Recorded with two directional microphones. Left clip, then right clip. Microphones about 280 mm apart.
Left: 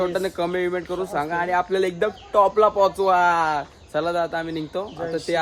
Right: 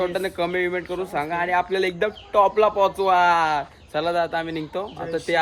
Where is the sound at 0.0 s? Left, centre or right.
Centre.